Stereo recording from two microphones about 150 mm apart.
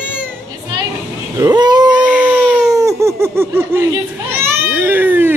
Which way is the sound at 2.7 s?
20° right (ahead or behind).